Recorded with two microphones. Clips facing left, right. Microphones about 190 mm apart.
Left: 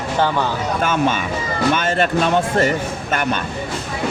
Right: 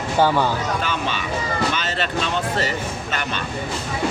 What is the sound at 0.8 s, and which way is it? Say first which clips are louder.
Speech: left 7 dB; 50° left (ahead or behind).